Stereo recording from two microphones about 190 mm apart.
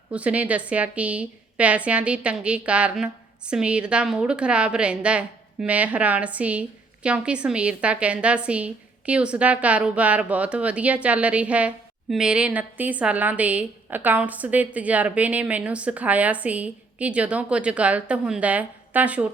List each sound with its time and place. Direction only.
0.1 s a woman's voice: 5° right (ahead or behind)